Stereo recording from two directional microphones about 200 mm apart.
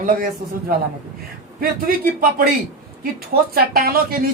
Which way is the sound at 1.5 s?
50° right (ahead or behind).